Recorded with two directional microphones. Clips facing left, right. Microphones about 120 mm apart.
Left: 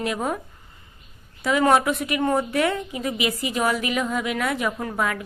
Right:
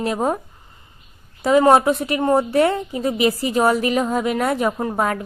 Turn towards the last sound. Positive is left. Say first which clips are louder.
# right 5 dB
turn(degrees=-35)  # may be behind; listen again after turning